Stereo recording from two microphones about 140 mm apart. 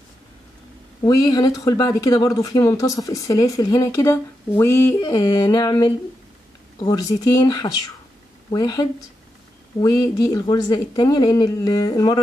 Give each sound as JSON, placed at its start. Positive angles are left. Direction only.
{"t": 1.0, "sound": "speech", "side_deg": 25}